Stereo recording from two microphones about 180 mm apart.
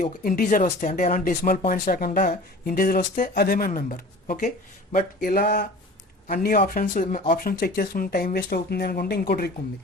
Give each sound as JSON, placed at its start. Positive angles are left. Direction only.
{"t": 0.0, "sound": "speech", "side_deg": 50}
{"t": 3.7, "sound": "speech", "side_deg": 45}